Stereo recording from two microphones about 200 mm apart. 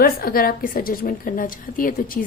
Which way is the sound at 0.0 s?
50° left (ahead or behind).